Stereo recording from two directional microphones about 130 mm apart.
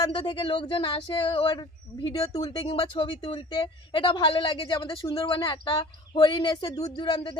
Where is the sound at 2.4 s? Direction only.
50° left (ahead or behind).